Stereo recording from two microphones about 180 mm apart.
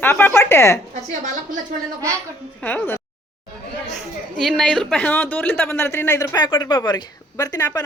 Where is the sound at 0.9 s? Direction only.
45° right (ahead or behind).